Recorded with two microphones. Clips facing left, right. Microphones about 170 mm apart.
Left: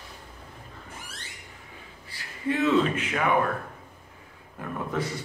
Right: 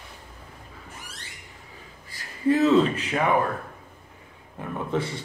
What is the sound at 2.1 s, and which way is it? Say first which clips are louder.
Speech: right 6 dB; 40° right (ahead or behind).